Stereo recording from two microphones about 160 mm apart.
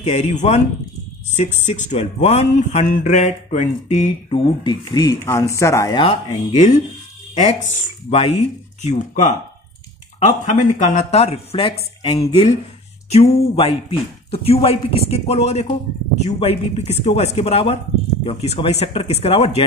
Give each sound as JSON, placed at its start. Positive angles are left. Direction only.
{"t": 0.0, "sound": "speech", "side_deg": 45}
{"t": 4.6, "sound": "speech", "side_deg": 25}
{"t": 5.9, "sound": "speech", "side_deg": 45}
{"t": 8.1, "sound": "speech", "side_deg": 40}